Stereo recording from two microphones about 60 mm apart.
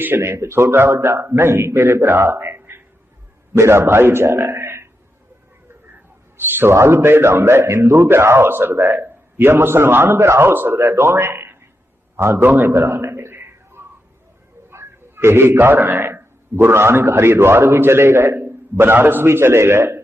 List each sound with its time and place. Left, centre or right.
0.2 s a man's voice: right
3.6 s a man's voice: right
6.3 s a man's voice: right
12.6 s a sound: right
14.7 s a man's voice: right